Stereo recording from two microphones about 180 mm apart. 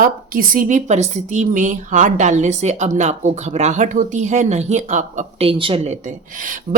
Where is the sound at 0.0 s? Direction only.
50° right (ahead or behind).